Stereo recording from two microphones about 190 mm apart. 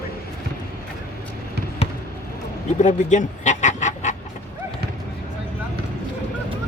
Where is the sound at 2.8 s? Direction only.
40° left (ahead or behind).